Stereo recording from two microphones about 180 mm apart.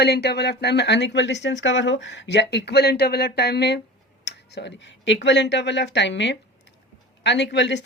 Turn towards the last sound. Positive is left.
turn(degrees=75)  # may be behind; listen again after turning